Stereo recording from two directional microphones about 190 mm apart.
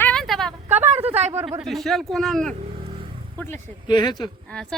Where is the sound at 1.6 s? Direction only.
Centre (ahead or behind).